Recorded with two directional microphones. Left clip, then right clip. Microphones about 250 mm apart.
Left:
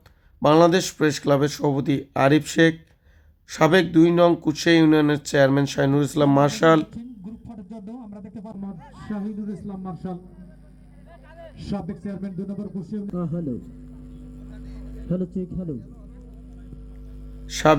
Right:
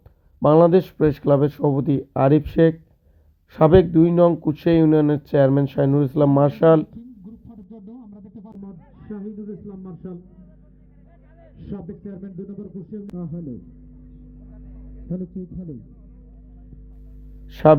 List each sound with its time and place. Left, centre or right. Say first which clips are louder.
0.6 s speech: right 2 dB; centre
7.4 s a sound: left 4 dB; left
11.6 s speech: left 3 dB; left
15.1 s speech: left 4 dB; centre
17.5 s speech: right 4 dB; centre